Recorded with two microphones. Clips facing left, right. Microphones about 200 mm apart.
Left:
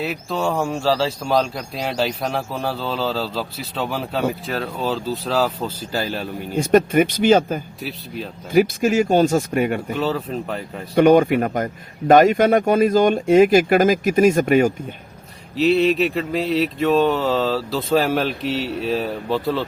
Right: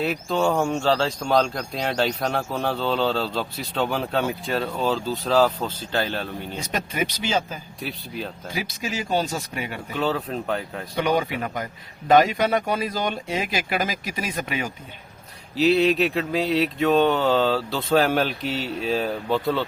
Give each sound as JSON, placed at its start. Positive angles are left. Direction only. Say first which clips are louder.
{"t": 0.0, "sound": "speech", "louder": "right 1 dB", "side_deg": 0}
{"t": 6.6, "sound": "a man's voice", "louder": "left 13 dB", "side_deg": 50}
{"t": 7.8, "sound": "speech", "louder": "left 2 dB", "side_deg": 0}
{"t": 8.5, "sound": "a man's voice", "louder": "left 15 dB", "side_deg": 50}
{"t": 9.9, "sound": "speech", "louder": "left 3 dB", "side_deg": 0}
{"t": 10.9, "sound": "a man's voice", "louder": "left 10 dB", "side_deg": 50}
{"t": 15.5, "sound": "speech", "louder": "left 2 dB", "side_deg": 0}